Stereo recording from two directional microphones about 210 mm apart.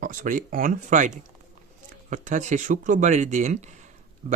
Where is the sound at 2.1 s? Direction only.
35° right (ahead or behind).